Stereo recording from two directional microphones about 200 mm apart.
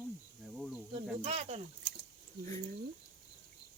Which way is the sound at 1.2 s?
30° right (ahead or behind).